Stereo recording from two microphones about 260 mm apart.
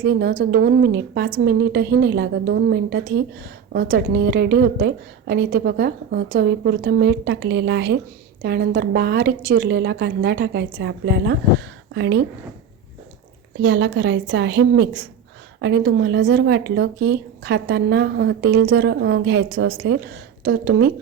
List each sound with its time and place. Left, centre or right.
0.0 s speech: right
13.6 s a woman's voice: right